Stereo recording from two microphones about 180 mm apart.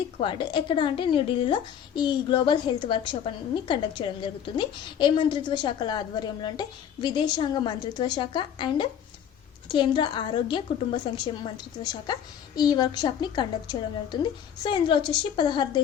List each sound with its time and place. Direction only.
0.2 s a woman's voice: 25° left (ahead or behind)